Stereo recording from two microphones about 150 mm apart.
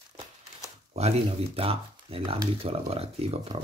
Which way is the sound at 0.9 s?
45° right (ahead or behind).